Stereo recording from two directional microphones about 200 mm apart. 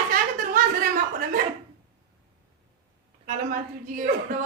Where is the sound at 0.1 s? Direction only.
40° right (ahead or behind).